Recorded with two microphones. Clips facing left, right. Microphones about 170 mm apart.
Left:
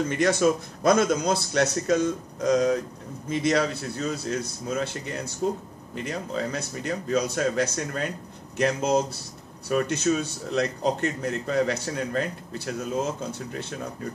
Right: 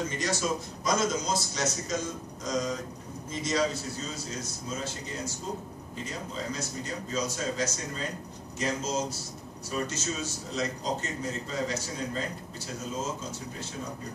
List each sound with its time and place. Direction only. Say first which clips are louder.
0.1 s a man's voice: left 9 dB; 60° left (ahead or behind)